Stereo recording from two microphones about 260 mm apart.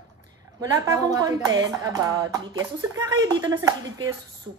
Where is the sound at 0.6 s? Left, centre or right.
Centre.